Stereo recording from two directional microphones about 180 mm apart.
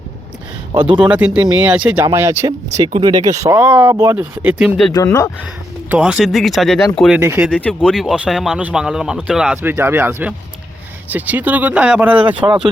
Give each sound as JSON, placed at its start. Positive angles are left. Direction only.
{"t": 0.7, "sound": "speech", "side_deg": -30}
{"t": 1.0, "sound": "speech", "side_deg": -5}
{"t": 5.9, "sound": "speech", "side_deg": -5}
{"t": 7.2, "sound": "speech", "side_deg": -10}
{"t": 7.5, "sound": "speech", "side_deg": 0}